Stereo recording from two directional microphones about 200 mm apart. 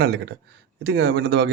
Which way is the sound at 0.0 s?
55° right (ahead or behind).